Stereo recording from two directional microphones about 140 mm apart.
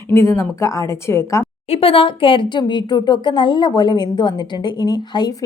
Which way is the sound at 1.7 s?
40° left (ahead or behind).